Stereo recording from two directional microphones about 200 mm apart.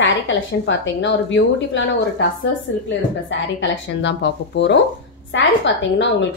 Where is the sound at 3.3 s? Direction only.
65° left (ahead or behind).